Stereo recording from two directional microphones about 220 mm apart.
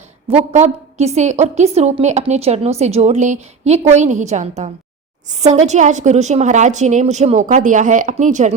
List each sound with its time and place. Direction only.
0.3 s a woman's voice: 30° right (ahead or behind)